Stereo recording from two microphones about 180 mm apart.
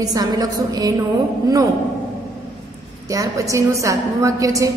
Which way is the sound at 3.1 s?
20° right (ahead or behind).